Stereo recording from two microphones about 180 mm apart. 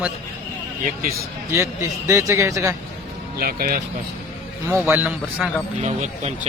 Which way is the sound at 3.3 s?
55° right (ahead or behind).